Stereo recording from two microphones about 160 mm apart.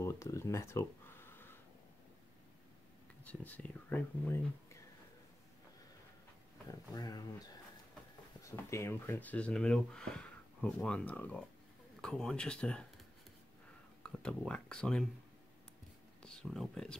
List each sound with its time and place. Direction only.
0.0 s a sound: 20° left (ahead or behind)
3.3 s speech: 10° left (ahead or behind)
6.9 s speech: 25° left (ahead or behind); by 13.0 s 5° left (ahead or behind)
14.0 s speech: 5° left (ahead or behind)
16.2 s speech: 5° left (ahead or behind)